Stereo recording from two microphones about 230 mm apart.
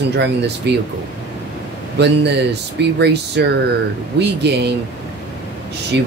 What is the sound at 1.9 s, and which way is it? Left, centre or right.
Speech, right.